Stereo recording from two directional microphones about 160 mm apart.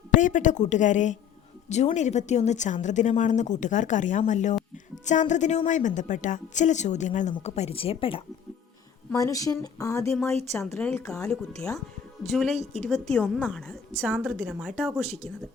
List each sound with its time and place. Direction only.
0.2 s a woman's voice: 50° left (ahead or behind); by 8.2 s 35° left (ahead or behind)
9.1 s speech: 20° left (ahead or behind)
10.8 s a woman's voice: 5° left (ahead or behind)